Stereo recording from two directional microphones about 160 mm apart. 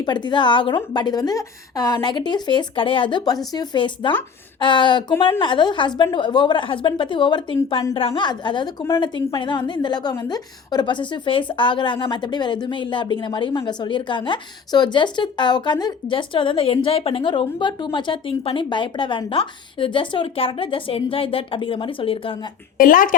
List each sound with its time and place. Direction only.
0.0 s a woman's voice: 30° left (ahead or behind)
22.8 s speech: 60° left (ahead or behind)